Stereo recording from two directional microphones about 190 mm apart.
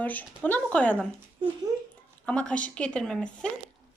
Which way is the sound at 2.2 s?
5° left (ahead or behind).